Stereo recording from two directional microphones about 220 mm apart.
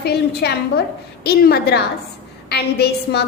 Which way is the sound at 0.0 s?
50° left (ahead or behind).